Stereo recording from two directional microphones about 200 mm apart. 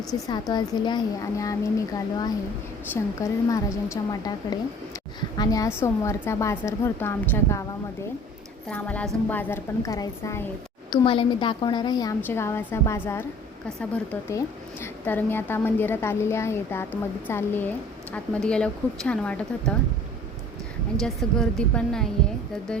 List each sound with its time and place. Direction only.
0.1 s a woman's voice: 20° left (ahead or behind)
8.7 s a woman's voice: 5° left (ahead or behind)
21.0 s speech: centre (ahead or behind)